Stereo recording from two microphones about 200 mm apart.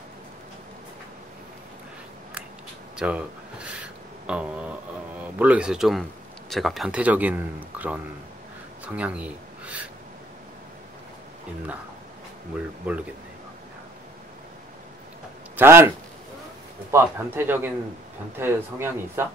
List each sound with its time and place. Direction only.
3.0 s speech: 5° right (ahead or behind)
12.9 s speech: 10° right (ahead or behind)
15.5 s a man's voice: 10° right (ahead or behind)
16.9 s speech: 10° right (ahead or behind)